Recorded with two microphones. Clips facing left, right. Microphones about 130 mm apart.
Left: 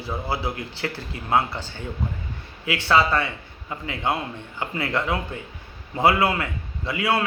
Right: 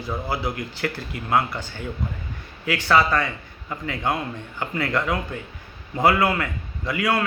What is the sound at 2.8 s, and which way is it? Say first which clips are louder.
Speech: even; 25° left (ahead or behind).